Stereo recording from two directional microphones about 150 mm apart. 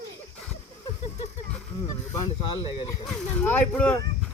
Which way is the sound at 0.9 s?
40° left (ahead or behind).